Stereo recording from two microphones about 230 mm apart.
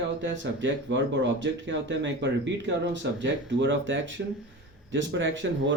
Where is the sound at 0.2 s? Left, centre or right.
Right.